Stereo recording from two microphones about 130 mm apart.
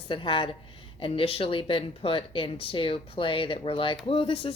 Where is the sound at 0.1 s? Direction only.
40° left (ahead or behind).